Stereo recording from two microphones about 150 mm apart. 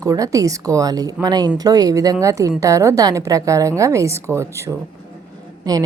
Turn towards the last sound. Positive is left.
turn(degrees=-25)  # may be behind; listen again after turning